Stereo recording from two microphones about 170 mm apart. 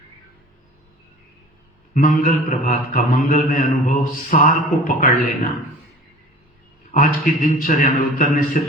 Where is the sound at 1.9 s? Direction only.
55° left (ahead or behind).